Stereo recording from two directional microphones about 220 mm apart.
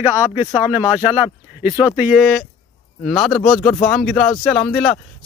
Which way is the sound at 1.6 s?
5° right (ahead or behind).